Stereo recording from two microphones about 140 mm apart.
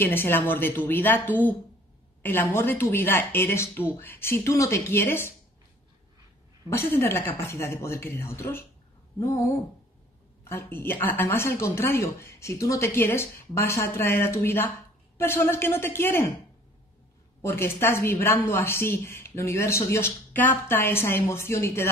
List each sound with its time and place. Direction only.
0.0 s a woman's voice: 15° left (ahead or behind)
2.2 s a woman's voice: 15° left (ahead or behind)
6.7 s a woman's voice: 15° left (ahead or behind)
9.2 s a sound: 20° left (ahead or behind)
10.5 s a woman's voice: 15° left (ahead or behind)
17.4 s a woman's voice: 15° left (ahead or behind)